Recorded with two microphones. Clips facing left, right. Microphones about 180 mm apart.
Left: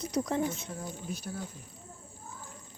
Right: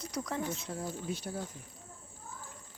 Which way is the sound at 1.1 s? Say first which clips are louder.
Right 1 dB; 25° right (ahead or behind).